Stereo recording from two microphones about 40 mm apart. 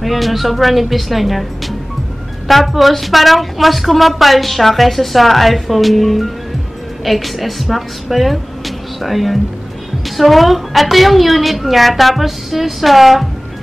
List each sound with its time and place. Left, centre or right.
0.0 s a woman's voice: centre